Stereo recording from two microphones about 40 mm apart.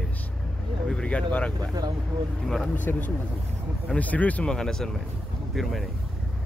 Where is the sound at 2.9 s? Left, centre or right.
Left.